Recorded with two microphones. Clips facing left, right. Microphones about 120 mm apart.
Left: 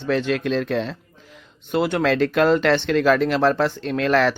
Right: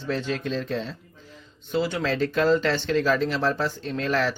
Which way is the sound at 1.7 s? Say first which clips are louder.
Left 5 dB; 60° left (ahead or behind).